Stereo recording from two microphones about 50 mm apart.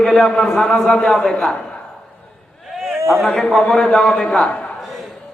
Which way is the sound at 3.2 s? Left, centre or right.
Centre.